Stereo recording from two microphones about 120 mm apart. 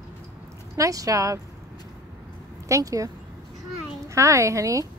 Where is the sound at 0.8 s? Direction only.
30° right (ahead or behind).